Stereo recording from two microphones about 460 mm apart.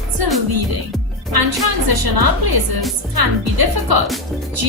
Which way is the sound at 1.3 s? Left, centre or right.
Right.